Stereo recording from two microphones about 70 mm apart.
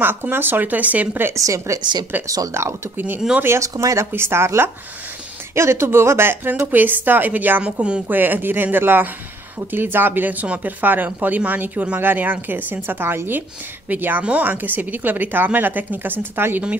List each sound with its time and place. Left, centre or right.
0.0 s speech: right
1.3 s speech: right
1.8 s speech: right
2.2 s speech: right
3.5 s speech: right
4.1 s speech: right